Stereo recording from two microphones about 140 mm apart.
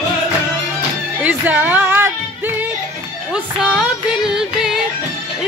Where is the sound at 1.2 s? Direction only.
10° right (ahead or behind).